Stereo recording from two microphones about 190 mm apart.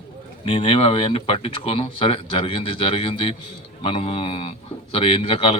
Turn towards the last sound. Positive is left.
turn(degrees=30)  # may be behind; listen again after turning